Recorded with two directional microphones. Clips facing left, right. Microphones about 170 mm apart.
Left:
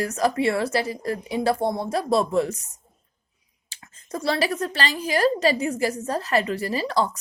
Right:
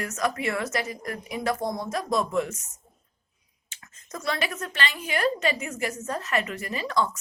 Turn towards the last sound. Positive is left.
turn(degrees=35)  # may be behind; listen again after turning